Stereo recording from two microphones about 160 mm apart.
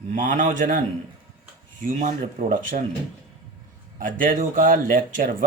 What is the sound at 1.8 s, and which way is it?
Speech, 60° right (ahead or behind).